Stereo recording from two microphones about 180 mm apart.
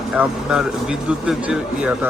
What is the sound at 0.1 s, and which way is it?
Speech, 5° right (ahead or behind).